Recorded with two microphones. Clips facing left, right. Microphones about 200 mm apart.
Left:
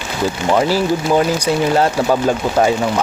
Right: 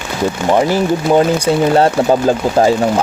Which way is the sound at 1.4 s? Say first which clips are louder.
Right 3 dB; 30° right (ahead or behind).